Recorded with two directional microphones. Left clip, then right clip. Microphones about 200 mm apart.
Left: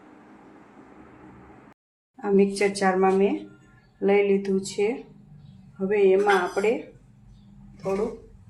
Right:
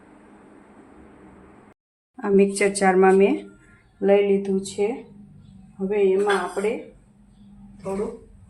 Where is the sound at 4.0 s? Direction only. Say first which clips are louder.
Right 3 dB; 10° right (ahead or behind); by 6.0 s 5° left (ahead or behind).